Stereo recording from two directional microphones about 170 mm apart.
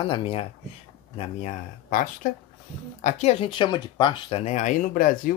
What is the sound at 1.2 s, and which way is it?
Speech, 45° left (ahead or behind).